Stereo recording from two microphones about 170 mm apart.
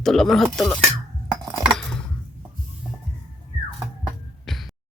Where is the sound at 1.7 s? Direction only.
5° left (ahead or behind).